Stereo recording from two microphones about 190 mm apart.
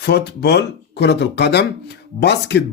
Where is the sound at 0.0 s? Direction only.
60° left (ahead or behind).